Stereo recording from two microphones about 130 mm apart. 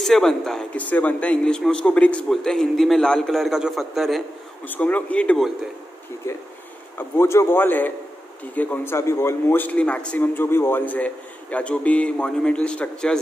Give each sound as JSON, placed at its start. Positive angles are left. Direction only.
{"t": 0.0, "sound": "speech", "side_deg": 5}
{"t": 4.6, "sound": "a man's voice", "side_deg": 15}
{"t": 7.0, "sound": "a man's voice", "side_deg": 20}